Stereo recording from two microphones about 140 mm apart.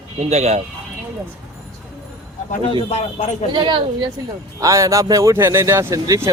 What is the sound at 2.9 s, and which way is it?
Speech, 50° left (ahead or behind).